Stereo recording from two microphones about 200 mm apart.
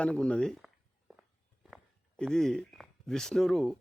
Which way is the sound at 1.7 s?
5° left (ahead or behind).